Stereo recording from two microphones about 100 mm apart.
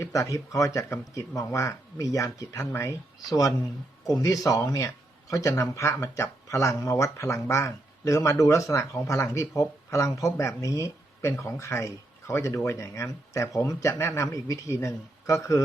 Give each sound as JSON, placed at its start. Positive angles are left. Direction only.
{"t": 0.0, "sound": "speech", "side_deg": 35}